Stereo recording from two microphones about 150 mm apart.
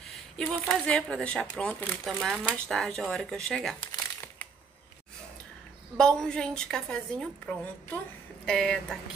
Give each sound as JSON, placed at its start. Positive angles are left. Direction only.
{"t": 0.0, "sound": "speech", "side_deg": 0}
{"t": 5.9, "sound": "speech", "side_deg": 5}